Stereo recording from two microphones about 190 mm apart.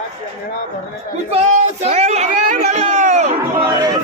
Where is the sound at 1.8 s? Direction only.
35° right (ahead or behind).